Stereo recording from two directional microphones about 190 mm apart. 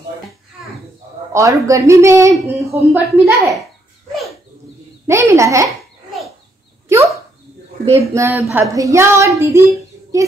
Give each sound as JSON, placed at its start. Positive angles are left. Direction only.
{"t": 1.3, "sound": "speech", "side_deg": -15}
{"t": 5.0, "sound": "speech", "side_deg": -15}
{"t": 6.9, "sound": "dog", "side_deg": -15}
{"t": 7.9, "sound": "a child's voice", "side_deg": -15}